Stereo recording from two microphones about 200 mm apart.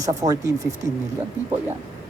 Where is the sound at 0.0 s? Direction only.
15° right (ahead or behind).